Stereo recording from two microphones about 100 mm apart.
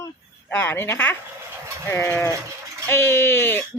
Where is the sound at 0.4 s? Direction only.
20° left (ahead or behind).